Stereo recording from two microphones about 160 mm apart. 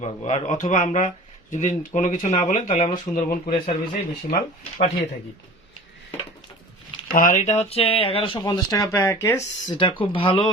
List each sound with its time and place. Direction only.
0.0 s speech: 45° left (ahead or behind); by 3.3 s 60° left (ahead or behind)
3.4 s speech: 35° left (ahead or behind)
7.1 s speech: 55° left (ahead or behind); by 10.5 s 30° left (ahead or behind)